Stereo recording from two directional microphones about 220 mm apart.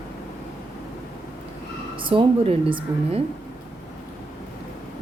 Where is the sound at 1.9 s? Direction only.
25° right (ahead or behind).